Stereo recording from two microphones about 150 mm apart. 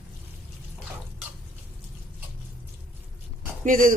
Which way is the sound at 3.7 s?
65° right (ahead or behind).